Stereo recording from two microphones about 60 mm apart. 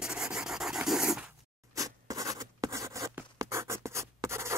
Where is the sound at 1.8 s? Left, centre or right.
Right.